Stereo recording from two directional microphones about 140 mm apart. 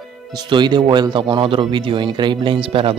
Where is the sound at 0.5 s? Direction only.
35° right (ahead or behind).